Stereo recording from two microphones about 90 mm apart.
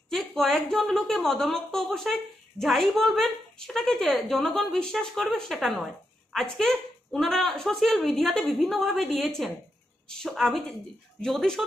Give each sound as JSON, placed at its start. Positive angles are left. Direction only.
{"t": 0.1, "sound": "a woman's voice", "side_deg": 0}